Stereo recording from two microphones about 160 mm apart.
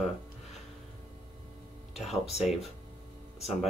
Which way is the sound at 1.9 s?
Centre (ahead or behind).